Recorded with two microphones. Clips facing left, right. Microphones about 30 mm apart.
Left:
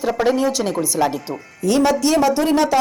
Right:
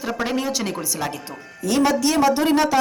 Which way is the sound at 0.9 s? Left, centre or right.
Centre.